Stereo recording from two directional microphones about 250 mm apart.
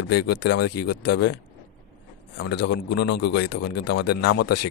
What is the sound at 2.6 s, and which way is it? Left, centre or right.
Speech, left.